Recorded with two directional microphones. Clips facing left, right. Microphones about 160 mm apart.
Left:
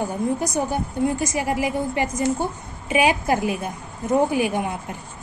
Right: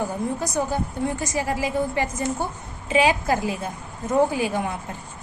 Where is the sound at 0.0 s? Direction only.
15° left (ahead or behind).